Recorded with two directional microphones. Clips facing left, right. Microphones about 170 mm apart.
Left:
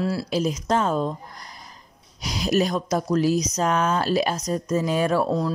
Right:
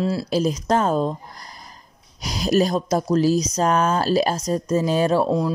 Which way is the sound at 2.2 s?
40° right (ahead or behind).